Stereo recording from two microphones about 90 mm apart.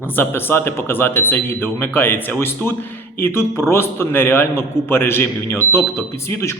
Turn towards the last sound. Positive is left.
turn(degrees=30)  # may be behind; listen again after turning